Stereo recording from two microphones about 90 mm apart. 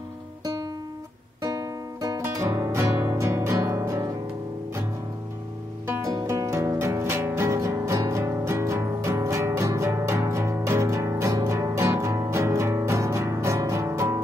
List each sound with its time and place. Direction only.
1.4 s music: 40° right (ahead or behind)
6.0 s music: 40° right (ahead or behind)